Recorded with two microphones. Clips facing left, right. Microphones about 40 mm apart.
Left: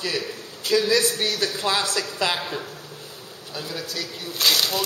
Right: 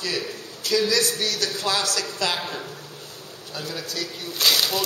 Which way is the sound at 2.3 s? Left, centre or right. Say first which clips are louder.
Left 1 dB; centre.